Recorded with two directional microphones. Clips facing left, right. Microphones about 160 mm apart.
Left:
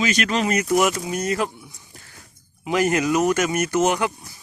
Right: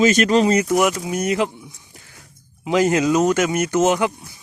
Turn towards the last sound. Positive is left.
turn(degrees=-20)  # may be behind; listen again after turning